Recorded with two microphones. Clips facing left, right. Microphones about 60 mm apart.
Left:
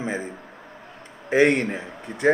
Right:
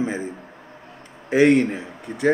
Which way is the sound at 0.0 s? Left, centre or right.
Left.